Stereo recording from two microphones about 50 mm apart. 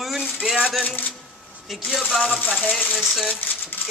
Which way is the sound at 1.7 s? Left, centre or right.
Centre.